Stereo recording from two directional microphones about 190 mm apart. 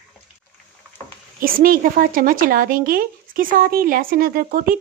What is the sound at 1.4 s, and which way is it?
A woman's voice, 50° right (ahead or behind).